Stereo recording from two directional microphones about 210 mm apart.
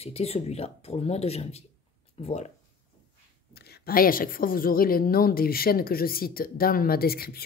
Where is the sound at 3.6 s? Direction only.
50° left (ahead or behind).